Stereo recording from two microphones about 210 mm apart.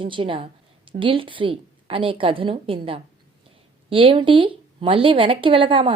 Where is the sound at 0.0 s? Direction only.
25° right (ahead or behind).